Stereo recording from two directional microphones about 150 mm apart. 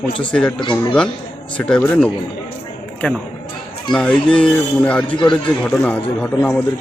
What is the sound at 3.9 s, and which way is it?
Speech, 5° left (ahead or behind).